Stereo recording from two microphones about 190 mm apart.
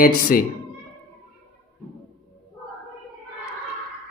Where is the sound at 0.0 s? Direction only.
50° left (ahead or behind).